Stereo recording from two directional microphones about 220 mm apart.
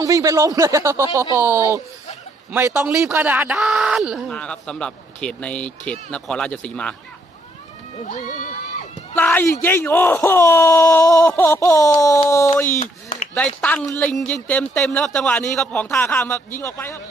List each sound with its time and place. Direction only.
0.0 s speech: 15° right (ahead or behind); by 6.9 s 5° left (ahead or behind)
7.9 s crowd: 35° left (ahead or behind)
9.1 s a man's voice: 10° left (ahead or behind)
12.8 s chop: 35° left (ahead or behind)
13.6 s speech: 5° left (ahead or behind)